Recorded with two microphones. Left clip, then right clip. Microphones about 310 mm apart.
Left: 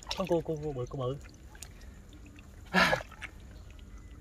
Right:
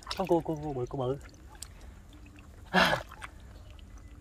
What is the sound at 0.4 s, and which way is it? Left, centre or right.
Speech, centre.